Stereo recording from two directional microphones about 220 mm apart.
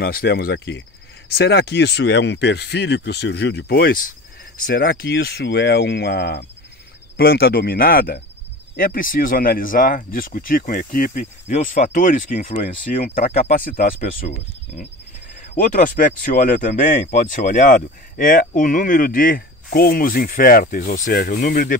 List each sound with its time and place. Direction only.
0.0 s speech: 45° left (ahead or behind)
14.2 s speech: 30° left (ahead or behind)